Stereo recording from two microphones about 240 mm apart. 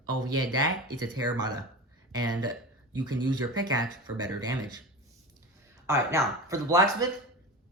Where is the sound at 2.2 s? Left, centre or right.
Right.